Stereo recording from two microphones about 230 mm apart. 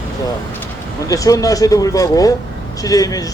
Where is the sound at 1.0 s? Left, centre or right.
Centre.